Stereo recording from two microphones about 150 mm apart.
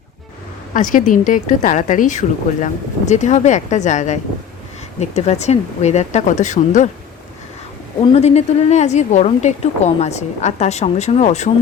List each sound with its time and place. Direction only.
0.7 s a woman's voice: 60° left (ahead or behind)
8.1 s a woman's voice: 45° left (ahead or behind)